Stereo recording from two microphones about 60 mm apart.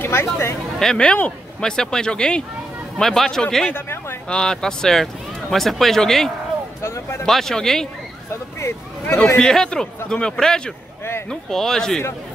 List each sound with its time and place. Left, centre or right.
0.0 s speech: left
0.7 s speech: centre
3.7 s a sound: left
4.3 s speech: centre
6.8 s speech: left
7.2 s speech: centre
8.3 s vehicle: left
9.4 s speech: centre